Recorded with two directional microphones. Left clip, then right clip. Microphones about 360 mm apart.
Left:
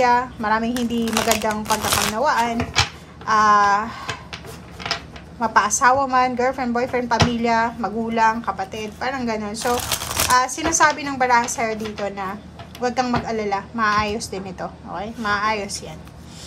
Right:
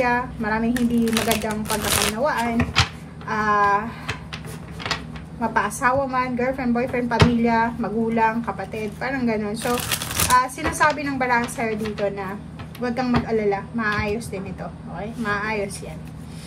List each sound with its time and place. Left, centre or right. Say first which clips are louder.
0.0 s speech: left 4 dB; centre
5.4 s a woman's voice: left 5 dB; centre
12.8 s a woman's voice: left 3 dB; centre